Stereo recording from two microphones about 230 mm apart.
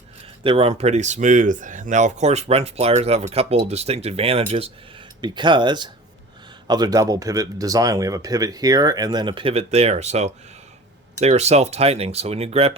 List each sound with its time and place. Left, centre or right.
0.4 s speech: right